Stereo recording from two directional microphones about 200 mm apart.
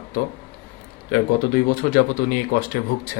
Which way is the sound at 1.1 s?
45° left (ahead or behind).